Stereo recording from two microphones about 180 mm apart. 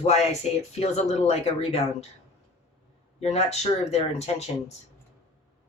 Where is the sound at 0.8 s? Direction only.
35° left (ahead or behind).